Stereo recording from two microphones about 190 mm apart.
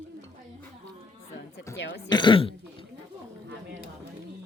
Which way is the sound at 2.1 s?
25° left (ahead or behind).